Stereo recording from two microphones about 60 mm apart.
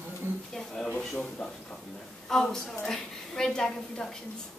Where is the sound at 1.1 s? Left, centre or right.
Centre.